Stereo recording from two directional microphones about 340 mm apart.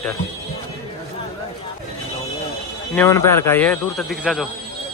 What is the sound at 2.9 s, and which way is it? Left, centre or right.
Speech, centre.